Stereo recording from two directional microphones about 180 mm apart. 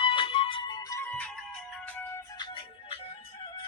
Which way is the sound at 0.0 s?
30° left (ahead or behind).